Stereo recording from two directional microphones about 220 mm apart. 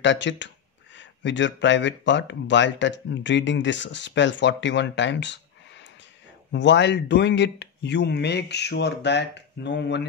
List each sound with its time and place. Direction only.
0.0 s speech: 55° left (ahead or behind)
6.5 s speech: 55° left (ahead or behind)